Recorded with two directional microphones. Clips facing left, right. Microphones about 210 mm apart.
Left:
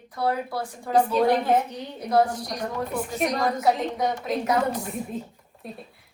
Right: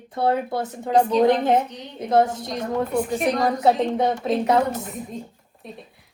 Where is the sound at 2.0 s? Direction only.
25° right (ahead or behind).